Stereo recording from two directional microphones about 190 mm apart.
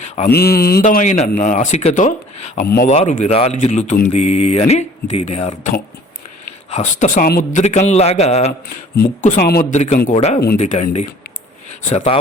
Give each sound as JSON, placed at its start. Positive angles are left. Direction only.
{"t": 0.3, "sound": "a sound", "side_deg": 55}
{"t": 0.8, "sound": "speech", "side_deg": 40}
{"t": 2.6, "sound": "a sound", "side_deg": 55}
{"t": 2.9, "sound": "speech", "side_deg": 35}
{"t": 7.6, "sound": "speech", "side_deg": 40}
{"t": 9.5, "sound": "speech", "side_deg": 45}